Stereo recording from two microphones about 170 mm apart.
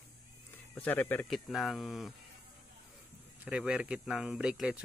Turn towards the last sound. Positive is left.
turn(degrees=-5)  # may be behind; listen again after turning